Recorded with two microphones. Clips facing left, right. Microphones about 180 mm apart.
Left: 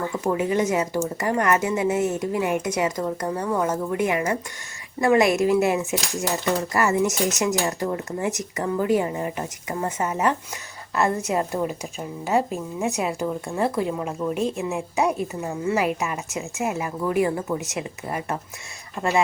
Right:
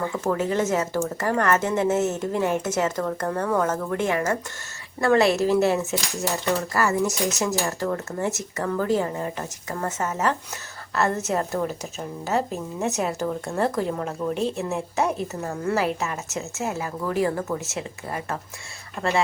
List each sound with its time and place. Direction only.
0.3 s speech: 15° left (ahead or behind)